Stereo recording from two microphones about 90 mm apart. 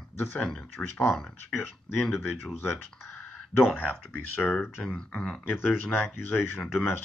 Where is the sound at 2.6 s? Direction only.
30° left (ahead or behind); by 5.4 s 10° left (ahead or behind).